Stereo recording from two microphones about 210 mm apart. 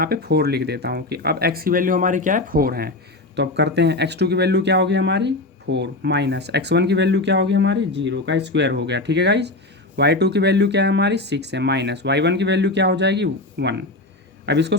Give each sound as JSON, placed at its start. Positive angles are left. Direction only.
{"t": 0.0, "sound": "speech", "side_deg": -50}